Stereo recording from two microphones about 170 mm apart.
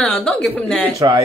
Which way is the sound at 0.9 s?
20° right (ahead or behind).